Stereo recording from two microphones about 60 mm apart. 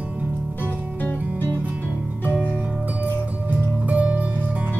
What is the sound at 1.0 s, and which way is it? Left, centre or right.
Music, left.